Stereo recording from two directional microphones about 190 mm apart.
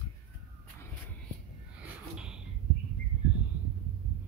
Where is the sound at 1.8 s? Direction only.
5° right (ahead or behind).